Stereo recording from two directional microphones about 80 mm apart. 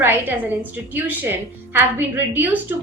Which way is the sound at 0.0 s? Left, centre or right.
Right.